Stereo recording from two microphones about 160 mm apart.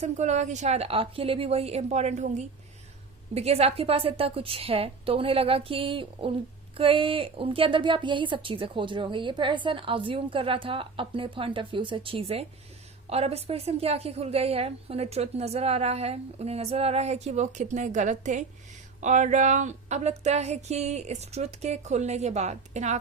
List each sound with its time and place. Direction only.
0.0 s speech: 45° right (ahead or behind)